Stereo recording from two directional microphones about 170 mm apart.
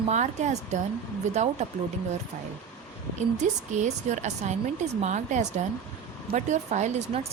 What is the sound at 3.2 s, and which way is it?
Speech, 45° right (ahead or behind).